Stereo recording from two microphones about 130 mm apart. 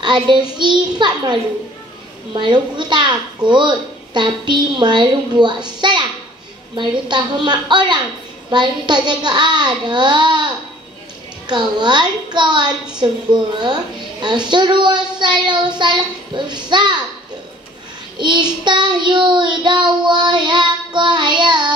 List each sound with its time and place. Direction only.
0.0 s child singing: 35° right (ahead or behind)
0.8 s a child's voice: 35° right (ahead or behind)
2.3 s a child's voice: 35° right (ahead or behind)
5.8 s a sound: 35° right (ahead or behind)
6.7 s a child's voice: 35° right (ahead or behind)
18.1 s child singing: 35° right (ahead or behind)
18.6 s a child's voice: 35° right (ahead or behind)